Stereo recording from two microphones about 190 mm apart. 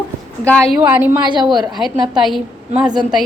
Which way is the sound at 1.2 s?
25° right (ahead or behind).